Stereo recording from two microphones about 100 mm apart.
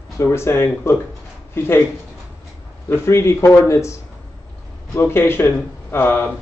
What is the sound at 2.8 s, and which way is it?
A man's voice, 25° left (ahead or behind).